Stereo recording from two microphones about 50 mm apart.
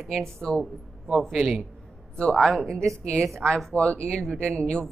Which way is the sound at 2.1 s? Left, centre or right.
Centre.